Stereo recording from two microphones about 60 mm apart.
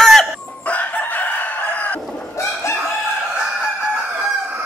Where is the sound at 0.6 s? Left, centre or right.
Left.